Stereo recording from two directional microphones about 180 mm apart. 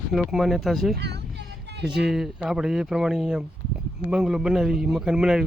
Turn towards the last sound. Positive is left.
turn(degrees=-5)  # may be behind; listen again after turning